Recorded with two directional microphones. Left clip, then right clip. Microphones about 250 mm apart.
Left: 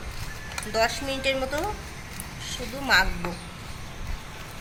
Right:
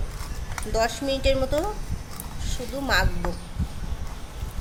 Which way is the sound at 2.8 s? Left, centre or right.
Right.